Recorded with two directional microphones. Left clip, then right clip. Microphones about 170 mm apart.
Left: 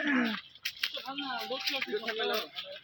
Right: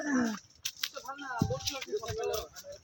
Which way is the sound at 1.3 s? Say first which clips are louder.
Left 1 dB; 10° right (ahead or behind).